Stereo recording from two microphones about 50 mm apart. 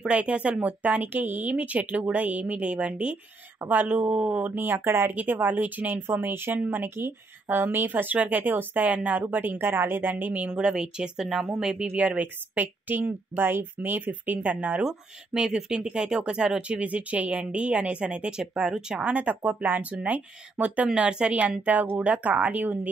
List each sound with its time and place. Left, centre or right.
0.0 s speech: right
4.7 s speech: right
5.1 s speech: right
6.0 s speech: right
10.5 s speech: centre
12.5 s speech: right
14.8 s speech: centre
19.1 s speech: right